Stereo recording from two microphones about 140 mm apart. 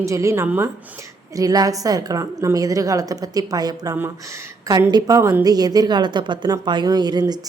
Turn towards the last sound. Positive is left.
turn(degrees=-30)  # may be behind; listen again after turning